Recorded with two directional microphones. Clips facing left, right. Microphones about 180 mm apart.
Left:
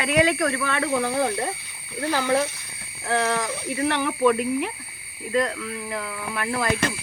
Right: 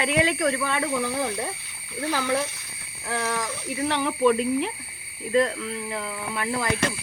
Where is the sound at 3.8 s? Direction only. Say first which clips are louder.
Left 1 dB; 20° right (ahead or behind).